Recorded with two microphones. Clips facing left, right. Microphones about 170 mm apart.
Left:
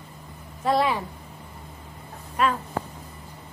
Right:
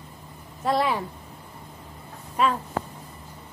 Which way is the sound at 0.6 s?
Centre (ahead or behind).